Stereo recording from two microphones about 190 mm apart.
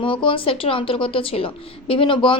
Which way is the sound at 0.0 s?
25° left (ahead or behind).